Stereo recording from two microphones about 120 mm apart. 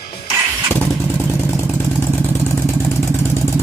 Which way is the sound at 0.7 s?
20° left (ahead or behind).